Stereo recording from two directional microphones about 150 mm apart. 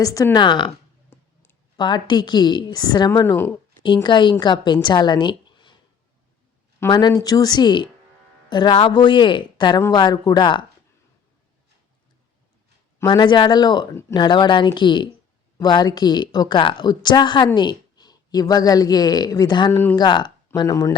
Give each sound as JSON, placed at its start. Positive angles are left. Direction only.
{"t": 0.0, "sound": "a woman's voice", "side_deg": 25}
{"t": 1.1, "sound": "clicking", "side_deg": 15}
{"t": 1.7, "sound": "a woman's voice", "side_deg": 30}
{"t": 3.8, "sound": "a woman's voice", "side_deg": 30}
{"t": 6.9, "sound": "a woman's voice", "side_deg": 25}
{"t": 13.1, "sound": "a woman's voice", "side_deg": 30}
{"t": 19.7, "sound": "speech", "side_deg": 15}
{"t": 20.0, "sound": "a woman's voice", "side_deg": 30}